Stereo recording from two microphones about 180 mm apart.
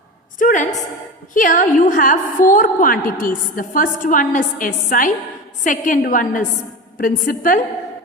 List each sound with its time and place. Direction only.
0.3 s a woman's voice: 45° left (ahead or behind)